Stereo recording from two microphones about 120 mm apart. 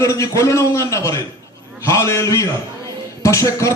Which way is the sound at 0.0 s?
25° left (ahead or behind).